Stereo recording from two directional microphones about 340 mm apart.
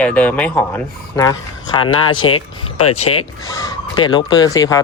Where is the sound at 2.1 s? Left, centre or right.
Left.